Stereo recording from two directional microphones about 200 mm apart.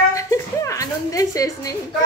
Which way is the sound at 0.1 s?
15° left (ahead or behind).